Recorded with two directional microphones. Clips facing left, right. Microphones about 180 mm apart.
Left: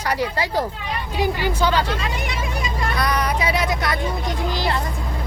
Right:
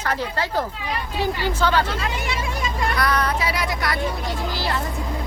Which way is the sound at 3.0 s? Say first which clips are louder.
Left 1 dB; 15° left (ahead or behind).